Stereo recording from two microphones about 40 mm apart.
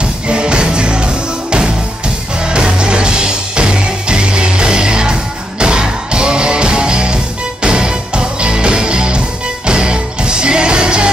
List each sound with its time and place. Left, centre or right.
0.0 s music: right